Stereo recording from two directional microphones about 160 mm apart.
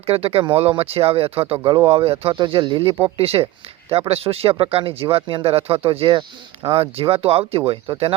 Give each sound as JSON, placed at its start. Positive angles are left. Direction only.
{"t": 0.0, "sound": "speech", "side_deg": -35}